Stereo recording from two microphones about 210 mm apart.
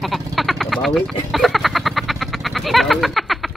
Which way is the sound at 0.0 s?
Centre (ahead or behind).